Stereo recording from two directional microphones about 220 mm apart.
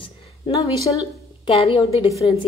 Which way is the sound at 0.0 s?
25° left (ahead or behind).